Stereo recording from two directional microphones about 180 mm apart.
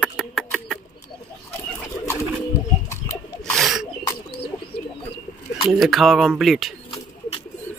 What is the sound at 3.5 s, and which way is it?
Bird, centre (ahead or behind).